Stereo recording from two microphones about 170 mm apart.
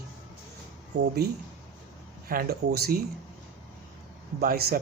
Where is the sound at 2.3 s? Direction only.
60° right (ahead or behind).